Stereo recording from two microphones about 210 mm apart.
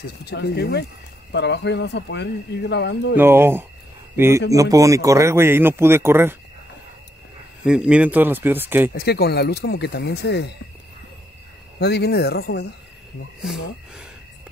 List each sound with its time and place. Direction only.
0.0 s speech: 50° left (ahead or behind)
3.2 s a man's voice: 10° right (ahead or behind)
7.6 s a man's voice: 5° right (ahead or behind)
8.9 s speech: 50° left (ahead or behind)
11.8 s speech: 50° left (ahead or behind)
13.4 s speech: 5° right (ahead or behind)